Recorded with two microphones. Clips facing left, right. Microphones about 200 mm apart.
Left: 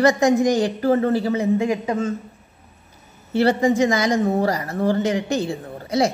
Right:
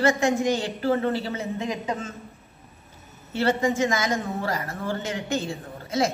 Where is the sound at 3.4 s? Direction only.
35° left (ahead or behind).